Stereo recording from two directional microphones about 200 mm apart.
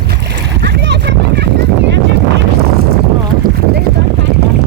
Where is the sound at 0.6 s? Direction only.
55° right (ahead or behind).